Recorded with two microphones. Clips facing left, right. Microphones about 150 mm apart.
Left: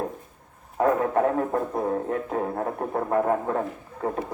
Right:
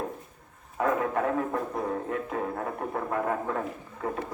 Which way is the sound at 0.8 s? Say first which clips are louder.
Left 5 dB; 35° left (ahead or behind).